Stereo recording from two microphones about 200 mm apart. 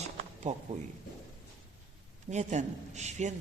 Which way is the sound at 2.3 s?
35° right (ahead or behind).